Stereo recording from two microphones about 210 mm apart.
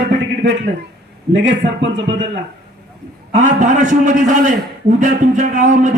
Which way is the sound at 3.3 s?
35° right (ahead or behind).